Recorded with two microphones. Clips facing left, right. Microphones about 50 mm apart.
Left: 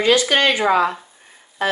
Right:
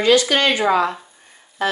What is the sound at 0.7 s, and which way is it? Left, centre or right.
Speech, centre.